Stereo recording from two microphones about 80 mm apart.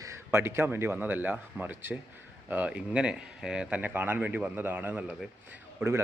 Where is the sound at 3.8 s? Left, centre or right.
Right.